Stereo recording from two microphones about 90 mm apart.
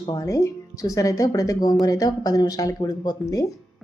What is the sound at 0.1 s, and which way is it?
A woman's voice, 40° left (ahead or behind).